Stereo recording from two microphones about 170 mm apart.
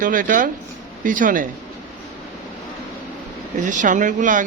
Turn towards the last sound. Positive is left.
turn(degrees=-50)  # may be behind; listen again after turning